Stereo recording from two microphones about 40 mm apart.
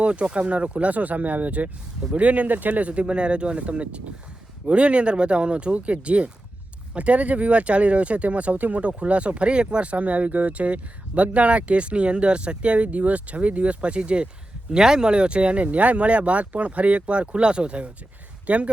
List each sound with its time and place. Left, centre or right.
0.0 s speech: right